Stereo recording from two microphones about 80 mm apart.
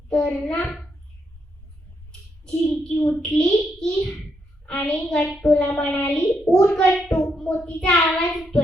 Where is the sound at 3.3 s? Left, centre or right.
Centre.